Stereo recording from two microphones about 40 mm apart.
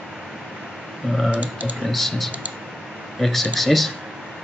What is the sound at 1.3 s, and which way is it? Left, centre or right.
Speech, right.